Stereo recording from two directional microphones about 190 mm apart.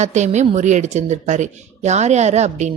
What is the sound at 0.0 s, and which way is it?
Speech, 40° right (ahead or behind).